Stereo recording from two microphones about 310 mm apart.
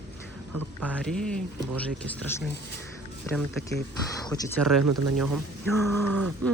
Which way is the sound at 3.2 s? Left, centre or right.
Centre.